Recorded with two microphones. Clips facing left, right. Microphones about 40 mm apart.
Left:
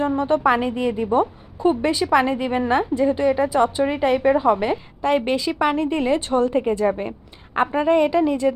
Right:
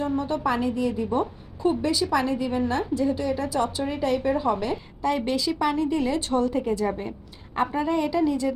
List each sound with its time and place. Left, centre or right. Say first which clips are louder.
0.0 s a woman's voice: left 6 dB; left